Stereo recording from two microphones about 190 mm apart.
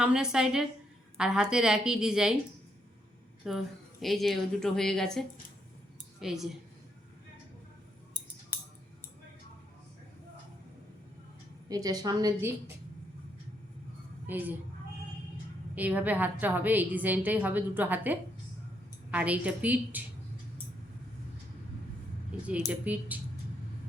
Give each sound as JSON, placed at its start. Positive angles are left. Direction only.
{"t": 0.0, "sound": "a woman's voice", "side_deg": -5}
{"t": 3.4, "sound": "a woman's voice", "side_deg": 0}
{"t": 11.7, "sound": "a woman's voice", "side_deg": -20}
{"t": 14.3, "sound": "a child's voice", "side_deg": -10}
{"t": 15.7, "sound": "a woman's voice", "side_deg": -10}
{"t": 22.4, "sound": "a woman's voice", "side_deg": -5}